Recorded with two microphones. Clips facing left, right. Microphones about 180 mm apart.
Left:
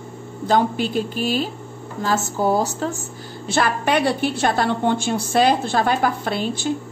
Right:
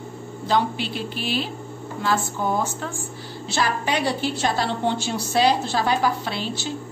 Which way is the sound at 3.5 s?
55° left (ahead or behind).